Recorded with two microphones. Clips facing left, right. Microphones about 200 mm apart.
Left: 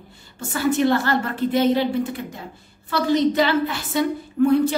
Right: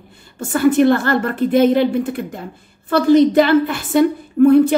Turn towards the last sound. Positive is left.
turn(degrees=-55)  # may be behind; listen again after turning